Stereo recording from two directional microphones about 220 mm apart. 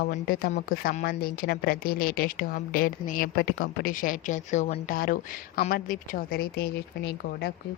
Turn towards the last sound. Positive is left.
turn(degrees=45)  # may be behind; listen again after turning